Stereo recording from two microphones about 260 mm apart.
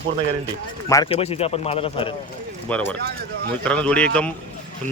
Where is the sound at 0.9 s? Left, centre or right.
Centre.